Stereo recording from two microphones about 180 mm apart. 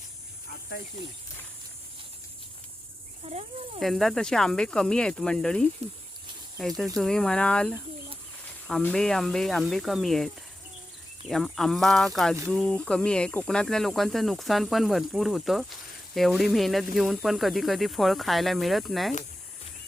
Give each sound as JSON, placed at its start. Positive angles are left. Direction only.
{"t": 3.2, "sound": "speech", "side_deg": -30}
{"t": 3.8, "sound": "speech", "side_deg": 0}